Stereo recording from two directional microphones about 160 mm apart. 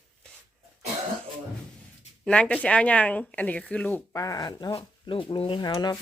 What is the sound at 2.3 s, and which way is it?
Speech, 5° left (ahead or behind).